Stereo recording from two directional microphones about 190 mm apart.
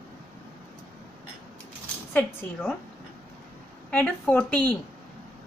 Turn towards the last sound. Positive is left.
turn(degrees=10)  # may be behind; listen again after turning